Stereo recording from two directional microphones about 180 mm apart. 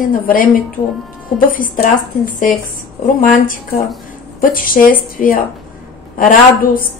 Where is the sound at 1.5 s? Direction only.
50° left (ahead or behind).